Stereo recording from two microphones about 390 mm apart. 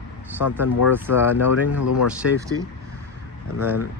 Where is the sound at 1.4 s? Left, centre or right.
Left.